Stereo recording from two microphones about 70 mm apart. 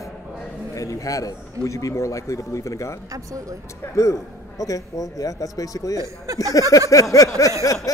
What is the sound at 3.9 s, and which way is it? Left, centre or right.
A man's voice, left.